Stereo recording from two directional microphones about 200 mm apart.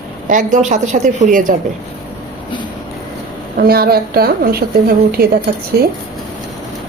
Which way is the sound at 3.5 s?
50° right (ahead or behind).